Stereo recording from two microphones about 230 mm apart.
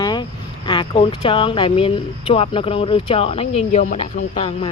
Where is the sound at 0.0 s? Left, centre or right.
Centre.